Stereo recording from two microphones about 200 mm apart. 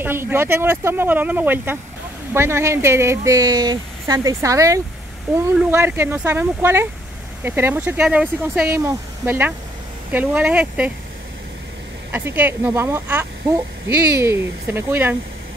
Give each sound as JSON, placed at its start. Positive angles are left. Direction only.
{"t": 0.0, "sound": "speech", "side_deg": -10}
{"t": 12.1, "sound": "speech", "side_deg": -10}